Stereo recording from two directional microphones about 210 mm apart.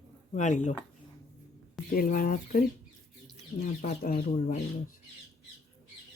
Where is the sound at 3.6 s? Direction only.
35° left (ahead or behind).